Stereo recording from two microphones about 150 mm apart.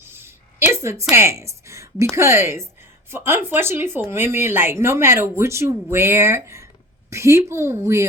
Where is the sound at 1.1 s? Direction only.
20° right (ahead or behind).